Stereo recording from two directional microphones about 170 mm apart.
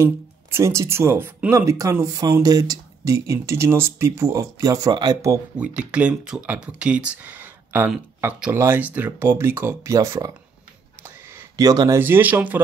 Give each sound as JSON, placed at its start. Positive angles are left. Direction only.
{"t": 0.0, "sound": "speech", "side_deg": -15}
{"t": 5.6, "sound": "speech", "side_deg": -5}
{"t": 11.3, "sound": "speech", "side_deg": -20}
{"t": 12.0, "sound": "speech", "side_deg": -10}